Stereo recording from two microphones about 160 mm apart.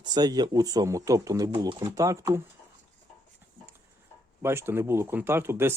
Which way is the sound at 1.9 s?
20° right (ahead or behind).